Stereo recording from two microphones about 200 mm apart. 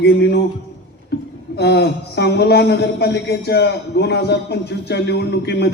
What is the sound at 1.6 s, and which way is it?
A man's voice, 55° left (ahead or behind).